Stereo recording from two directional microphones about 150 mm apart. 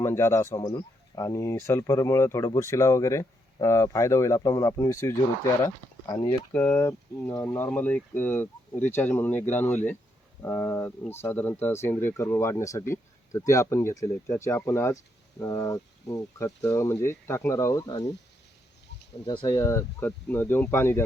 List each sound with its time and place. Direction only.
0.0 s speech: 15° left (ahead or behind)
19.2 s speech: 35° left (ahead or behind)
19.5 s speech: 20° left (ahead or behind)